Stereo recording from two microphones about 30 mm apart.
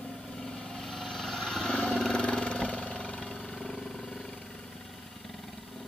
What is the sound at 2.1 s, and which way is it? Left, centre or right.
Vehicle, left.